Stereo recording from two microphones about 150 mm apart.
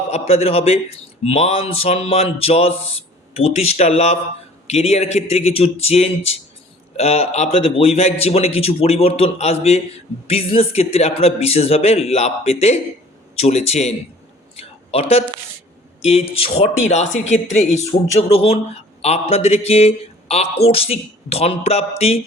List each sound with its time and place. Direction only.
0.1 s a man's voice: 40° left (ahead or behind)
14.5 s a sound: 40° left (ahead or behind)
16.0 s speech: 40° left (ahead or behind)